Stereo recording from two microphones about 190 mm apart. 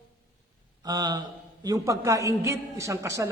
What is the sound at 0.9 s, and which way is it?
A man's voice, 20° right (ahead or behind).